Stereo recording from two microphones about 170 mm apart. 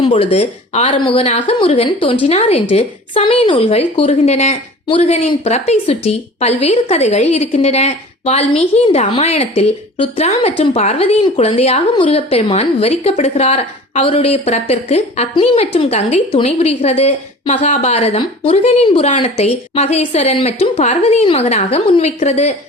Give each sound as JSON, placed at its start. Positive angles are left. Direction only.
{"t": 0.0, "sound": "a woman's voice", "side_deg": 30}